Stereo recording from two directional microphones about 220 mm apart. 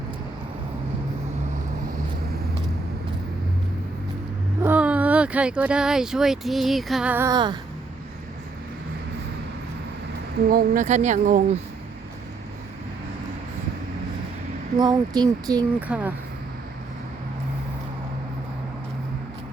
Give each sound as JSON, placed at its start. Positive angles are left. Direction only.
{"t": 4.6, "sound": "speech", "side_deg": -5}
{"t": 10.5, "sound": "speech", "side_deg": -40}
{"t": 14.8, "sound": "speech", "side_deg": -15}
{"t": 15.9, "sound": "speech", "side_deg": -5}